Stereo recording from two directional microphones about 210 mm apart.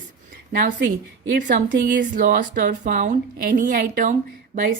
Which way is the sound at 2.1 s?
40° right (ahead or behind).